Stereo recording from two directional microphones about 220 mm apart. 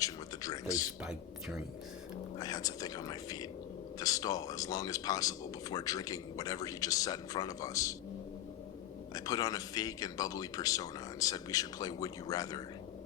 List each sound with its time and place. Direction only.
0.0 s a sound: 15° left (ahead or behind)
1.0 s speech: centre (ahead or behind)
2.4 s speech: 15° left (ahead or behind)
9.1 s speech: 15° left (ahead or behind)